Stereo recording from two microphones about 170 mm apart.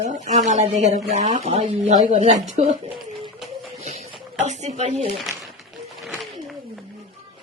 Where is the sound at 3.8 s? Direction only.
40° right (ahead or behind).